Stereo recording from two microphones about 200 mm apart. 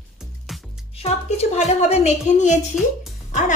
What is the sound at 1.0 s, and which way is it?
A woman's voice, 35° left (ahead or behind).